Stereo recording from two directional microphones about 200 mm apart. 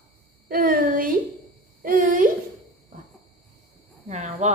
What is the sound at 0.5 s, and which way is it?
A woman's voice, 45° right (ahead or behind).